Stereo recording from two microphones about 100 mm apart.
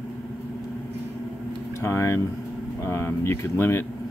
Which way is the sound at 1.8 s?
25° left (ahead or behind).